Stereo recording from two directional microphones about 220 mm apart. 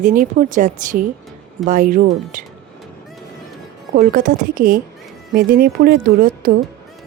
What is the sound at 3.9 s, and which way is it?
A woman's voice, 40° right (ahead or behind).